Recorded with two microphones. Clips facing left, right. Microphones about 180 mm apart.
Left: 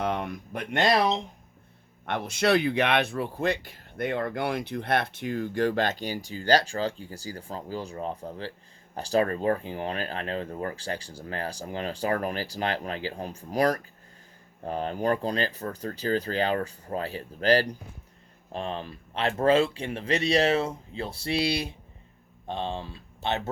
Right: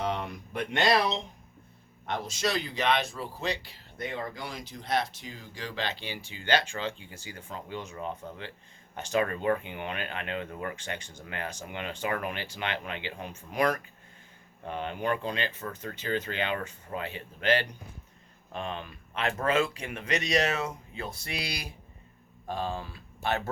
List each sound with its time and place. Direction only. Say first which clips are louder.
0.0 s speech: left 3 dB; 55° left (ahead or behind); by 23.5 s 20° left (ahead or behind)